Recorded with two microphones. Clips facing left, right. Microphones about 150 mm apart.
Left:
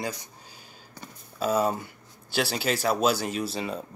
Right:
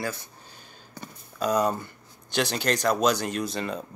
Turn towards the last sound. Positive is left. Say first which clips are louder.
# right 1 dB
turn(degrees=5)  # may be behind; listen again after turning